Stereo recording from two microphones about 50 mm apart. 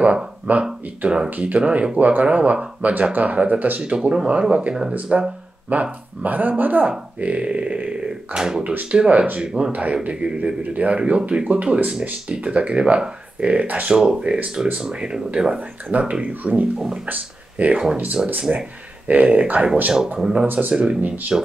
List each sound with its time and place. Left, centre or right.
0.0 s speech: right
1.3 s speech: right
3.9 s speech: centre
5.7 s speech: right
13.9 s speech: centre
16.7 s speech: centre
17.1 s speech: right
20.2 s speech: centre
20.4 s speech: right
20.7 s speech: centre